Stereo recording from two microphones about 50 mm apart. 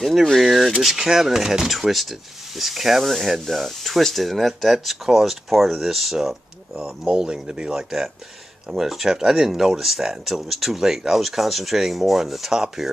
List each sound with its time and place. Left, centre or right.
0.0 s speech: centre
6.8 s speech: centre
7.7 s speech: centre